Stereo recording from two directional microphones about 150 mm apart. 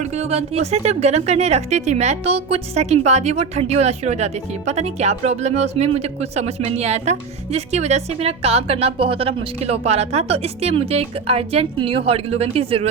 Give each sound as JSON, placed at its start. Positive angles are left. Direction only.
{"t": 0.0, "sound": "a woman's voice", "side_deg": -45}